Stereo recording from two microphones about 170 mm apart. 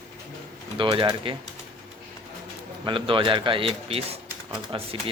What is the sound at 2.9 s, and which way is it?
Speech, 30° right (ahead or behind).